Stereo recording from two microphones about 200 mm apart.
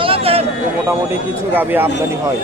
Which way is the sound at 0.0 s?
30° right (ahead or behind).